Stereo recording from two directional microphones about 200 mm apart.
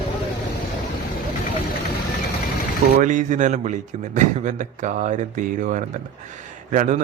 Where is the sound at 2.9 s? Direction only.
40° right (ahead or behind).